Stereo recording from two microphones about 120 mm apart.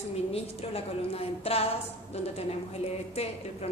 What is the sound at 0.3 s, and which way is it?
A woman's voice, 55° left (ahead or behind).